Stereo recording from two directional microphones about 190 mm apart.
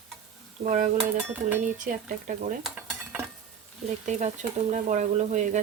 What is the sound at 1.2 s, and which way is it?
Dishes, 10° right (ahead or behind).